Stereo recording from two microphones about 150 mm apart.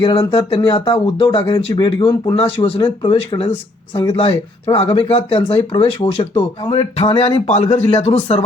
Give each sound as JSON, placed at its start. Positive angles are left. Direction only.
{"t": 0.0, "sound": "speech", "side_deg": 35}